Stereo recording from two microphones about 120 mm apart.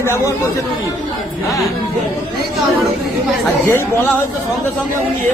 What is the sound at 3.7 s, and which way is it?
Speech, 20° left (ahead or behind).